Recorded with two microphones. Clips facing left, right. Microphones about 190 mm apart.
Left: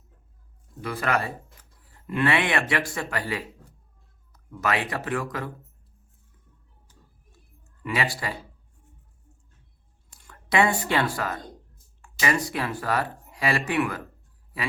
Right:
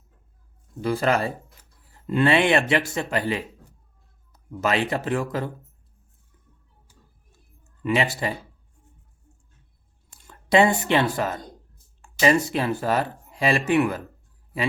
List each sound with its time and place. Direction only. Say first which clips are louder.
0.8 s speech: right 5 dB; 30° right (ahead or behind)
7.8 s speech: right 5 dB; 25° right (ahead or behind)
10.2 s speech: right 4 dB; 25° right (ahead or behind)